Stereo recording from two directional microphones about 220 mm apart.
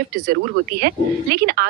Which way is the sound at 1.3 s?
45° right (ahead or behind).